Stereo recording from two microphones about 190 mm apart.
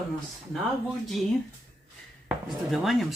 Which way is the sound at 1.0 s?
Centre (ahead or behind).